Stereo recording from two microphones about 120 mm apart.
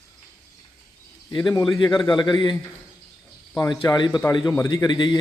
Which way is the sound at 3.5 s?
25° left (ahead or behind).